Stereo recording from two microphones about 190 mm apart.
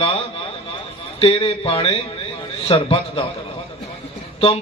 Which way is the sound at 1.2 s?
30° left (ahead or behind).